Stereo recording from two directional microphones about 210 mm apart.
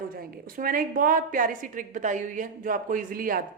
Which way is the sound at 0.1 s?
45° right (ahead or behind).